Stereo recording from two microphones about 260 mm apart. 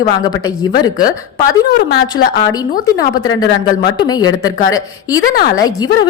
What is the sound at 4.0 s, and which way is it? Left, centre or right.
A woman's voice, centre.